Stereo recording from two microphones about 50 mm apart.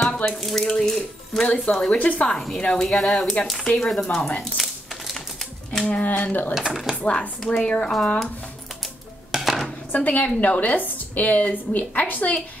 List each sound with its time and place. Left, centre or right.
0.0 s a sound: centre
0.4 s speech: centre
2.0 s a woman's voice: left
2.8 s speech: centre
4.4 s typewriter: centre
5.9 s a woman's voice: left
6.5 s speech: centre
7.1 s a woman's voice: left
9.3 s dishes: centre
9.9 s a woman's voice: left